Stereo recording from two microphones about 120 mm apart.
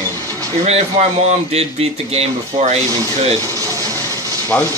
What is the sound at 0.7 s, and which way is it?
Speech, 65° right (ahead or behind).